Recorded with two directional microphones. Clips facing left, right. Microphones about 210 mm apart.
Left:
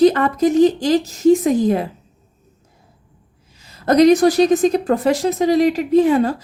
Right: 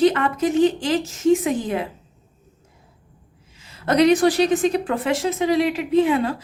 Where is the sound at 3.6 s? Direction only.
40° left (ahead or behind).